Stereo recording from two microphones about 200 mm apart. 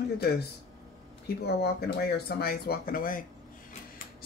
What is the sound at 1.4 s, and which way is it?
Speech, 50° left (ahead or behind).